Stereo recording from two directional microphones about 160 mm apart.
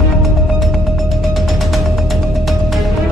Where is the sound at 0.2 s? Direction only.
Centre (ahead or behind).